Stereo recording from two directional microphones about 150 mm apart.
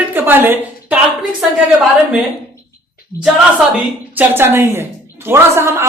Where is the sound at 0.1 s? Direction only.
15° right (ahead or behind).